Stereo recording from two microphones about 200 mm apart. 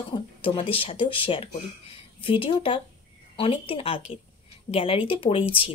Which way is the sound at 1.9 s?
25° left (ahead or behind).